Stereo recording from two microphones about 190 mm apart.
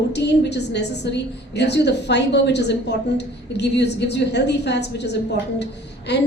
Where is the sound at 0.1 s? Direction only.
65° left (ahead or behind).